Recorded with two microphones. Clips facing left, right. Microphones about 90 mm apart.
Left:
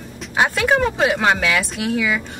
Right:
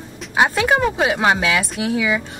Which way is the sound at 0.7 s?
5° right (ahead or behind).